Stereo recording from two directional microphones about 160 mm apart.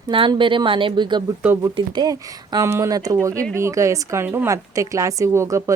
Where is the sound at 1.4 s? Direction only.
10° right (ahead or behind).